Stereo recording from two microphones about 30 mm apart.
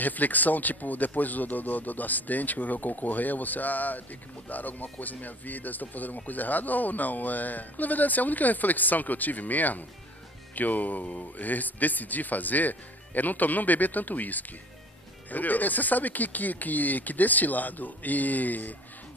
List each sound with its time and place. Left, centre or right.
0.0 s speech: left